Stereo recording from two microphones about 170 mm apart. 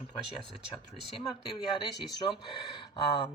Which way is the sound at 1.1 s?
30° left (ahead or behind).